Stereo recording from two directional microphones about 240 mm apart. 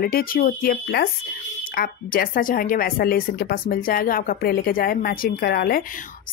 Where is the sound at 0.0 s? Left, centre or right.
Left.